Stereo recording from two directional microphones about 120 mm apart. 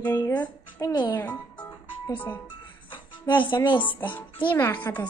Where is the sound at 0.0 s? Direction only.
20° left (ahead or behind).